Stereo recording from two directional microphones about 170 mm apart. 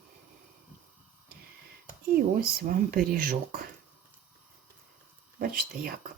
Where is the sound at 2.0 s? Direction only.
65° right (ahead or behind).